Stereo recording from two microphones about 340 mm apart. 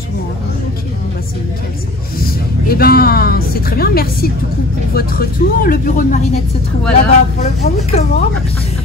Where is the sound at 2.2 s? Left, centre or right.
Left.